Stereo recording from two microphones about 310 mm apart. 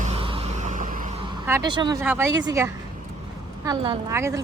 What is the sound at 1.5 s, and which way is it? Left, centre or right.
Speech, centre.